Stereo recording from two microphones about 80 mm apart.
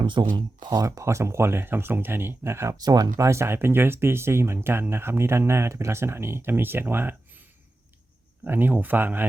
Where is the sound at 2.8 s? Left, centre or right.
Right.